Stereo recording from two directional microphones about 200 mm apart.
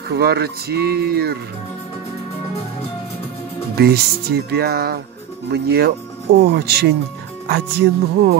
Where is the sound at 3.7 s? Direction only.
50° right (ahead or behind).